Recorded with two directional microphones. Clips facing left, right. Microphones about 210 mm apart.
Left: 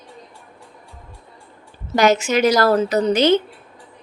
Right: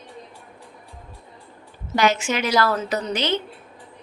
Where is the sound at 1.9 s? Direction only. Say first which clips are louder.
Left 5 dB; 40° left (ahead or behind).